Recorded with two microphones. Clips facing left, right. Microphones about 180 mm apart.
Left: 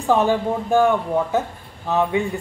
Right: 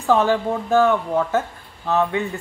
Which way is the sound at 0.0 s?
15° left (ahead or behind).